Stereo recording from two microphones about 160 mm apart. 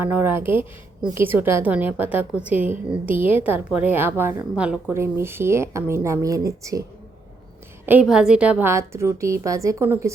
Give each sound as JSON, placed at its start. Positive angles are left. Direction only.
{"t": 0.0, "sound": "a woman's voice", "side_deg": -10}
{"t": 7.9, "sound": "a woman's voice", "side_deg": -5}